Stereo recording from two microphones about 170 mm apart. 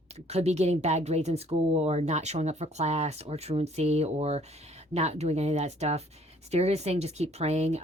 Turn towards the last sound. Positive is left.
turn(degrees=-40)  # may be behind; listen again after turning